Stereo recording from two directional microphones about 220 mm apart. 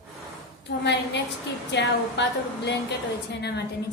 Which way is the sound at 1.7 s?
50° left (ahead or behind).